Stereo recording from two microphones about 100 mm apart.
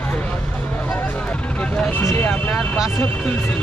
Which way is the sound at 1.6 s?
15° left (ahead or behind).